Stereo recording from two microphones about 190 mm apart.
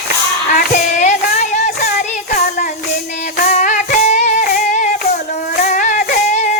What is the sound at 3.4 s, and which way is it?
Music, 40° left (ahead or behind).